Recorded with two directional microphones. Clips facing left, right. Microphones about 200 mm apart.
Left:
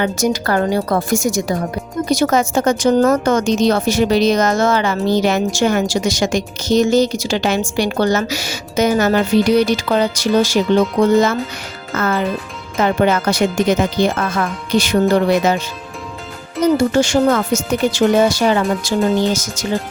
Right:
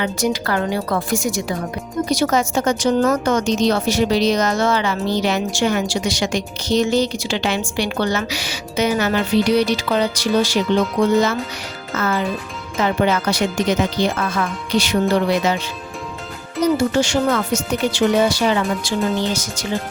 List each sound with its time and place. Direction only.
0.0 s a woman's voice: 45° left (ahead or behind)
11.9 s a woman's voice: 55° left (ahead or behind)
16.9 s a woman's voice: 45° left (ahead or behind)